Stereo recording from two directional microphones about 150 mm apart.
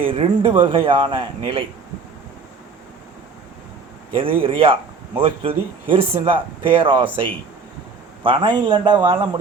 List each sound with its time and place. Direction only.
0.0 s speech: 35° right (ahead or behind)
4.4 s speech: 35° right (ahead or behind)